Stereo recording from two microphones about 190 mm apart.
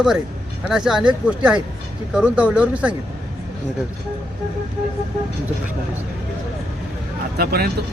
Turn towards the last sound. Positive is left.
turn(degrees=-55)  # may be behind; listen again after turning